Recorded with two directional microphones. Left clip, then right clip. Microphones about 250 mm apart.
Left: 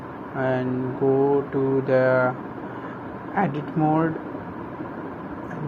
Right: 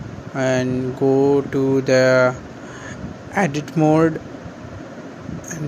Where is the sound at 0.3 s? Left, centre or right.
Right.